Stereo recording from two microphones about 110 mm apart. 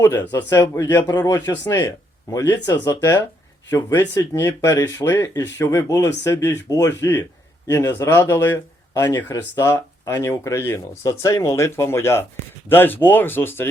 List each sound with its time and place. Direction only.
0.5 s speech: 30° left (ahead or behind)
3.8 s speech: 35° left (ahead or behind); by 8.6 s 20° left (ahead or behind)
8.9 s speech: 35° left (ahead or behind)
9.4 s speech: 25° left (ahead or behind)